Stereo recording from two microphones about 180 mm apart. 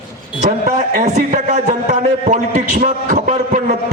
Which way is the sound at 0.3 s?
45° right (ahead or behind).